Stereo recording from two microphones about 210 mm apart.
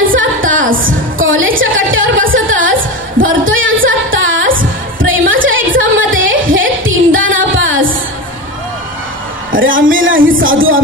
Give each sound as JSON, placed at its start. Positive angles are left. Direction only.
{"t": 0.1, "sound": "a sound", "side_deg": -65}
{"t": 3.2, "sound": "singing", "side_deg": -70}
{"t": 4.6, "sound": "music", "side_deg": -70}
{"t": 9.5, "sound": "music", "side_deg": -65}